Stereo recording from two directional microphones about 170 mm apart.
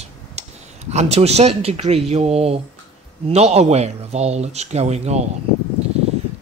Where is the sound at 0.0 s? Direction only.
40° right (ahead or behind).